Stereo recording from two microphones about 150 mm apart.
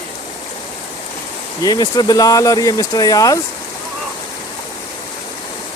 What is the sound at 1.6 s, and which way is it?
Speech, 25° left (ahead or behind).